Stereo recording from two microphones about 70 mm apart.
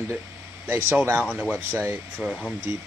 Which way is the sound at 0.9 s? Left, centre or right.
Right.